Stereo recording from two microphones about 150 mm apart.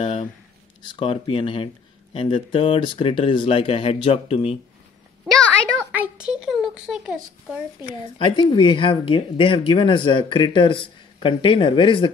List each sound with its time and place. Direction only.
0.0 s speech: 35° left (ahead or behind)
5.9 s a child's voice: 10° right (ahead or behind)
7.9 s speech: 30° left (ahead or behind)